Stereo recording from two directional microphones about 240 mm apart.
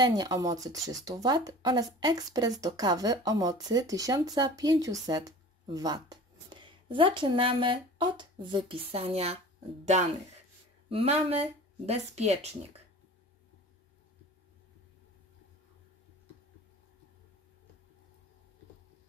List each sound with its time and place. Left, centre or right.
0.0 s speech: centre
10.9 s speech: right